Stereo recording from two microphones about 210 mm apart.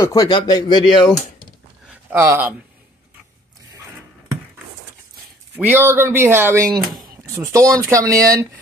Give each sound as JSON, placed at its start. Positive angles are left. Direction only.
{"t": 0.0, "sound": "speech", "side_deg": 15}
{"t": 2.1, "sound": "speech", "side_deg": -10}
{"t": 5.6, "sound": "speech", "side_deg": -10}